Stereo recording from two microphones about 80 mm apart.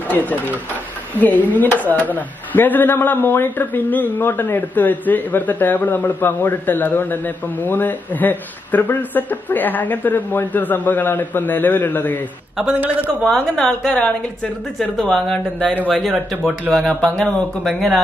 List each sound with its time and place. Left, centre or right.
0.1 s a man's voice: left
12.7 s a man's voice: right
13.3 s a woman's voice: centre
17.1 s a woman's voice: centre